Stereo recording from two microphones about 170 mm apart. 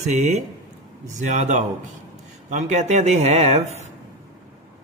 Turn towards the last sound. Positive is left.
turn(degrees=-40)  # may be behind; listen again after turning